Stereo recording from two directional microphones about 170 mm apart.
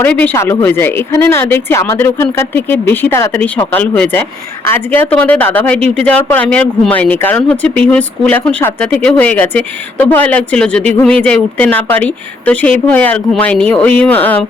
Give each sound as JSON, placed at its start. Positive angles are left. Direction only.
{"t": 0.0, "sound": "speech", "side_deg": 10}